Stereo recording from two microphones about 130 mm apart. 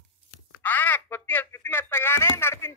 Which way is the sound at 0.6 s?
15° left (ahead or behind).